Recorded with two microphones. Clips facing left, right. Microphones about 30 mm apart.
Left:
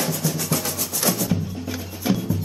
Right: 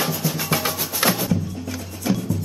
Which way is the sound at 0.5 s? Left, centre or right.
Right.